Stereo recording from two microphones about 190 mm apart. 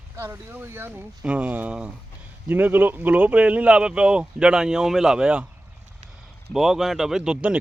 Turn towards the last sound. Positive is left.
turn(degrees=-5)  # may be behind; listen again after turning